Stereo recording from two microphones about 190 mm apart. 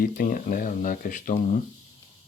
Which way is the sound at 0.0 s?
45° left (ahead or behind).